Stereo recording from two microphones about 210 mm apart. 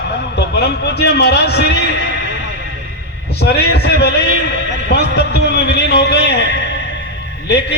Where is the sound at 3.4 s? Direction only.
50° left (ahead or behind).